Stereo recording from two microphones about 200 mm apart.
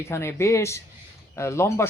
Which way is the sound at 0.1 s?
15° left (ahead or behind).